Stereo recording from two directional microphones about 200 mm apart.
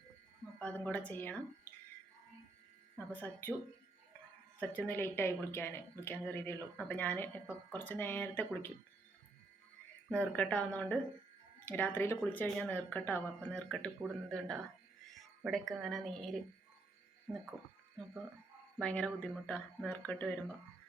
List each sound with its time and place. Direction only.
0.6 s speech: 5° left (ahead or behind)
3.1 s speech: 10° left (ahead or behind)
4.6 s speech: 10° left (ahead or behind)
10.1 s speech: 5° left (ahead or behind)
18.8 s speech: 5° left (ahead or behind)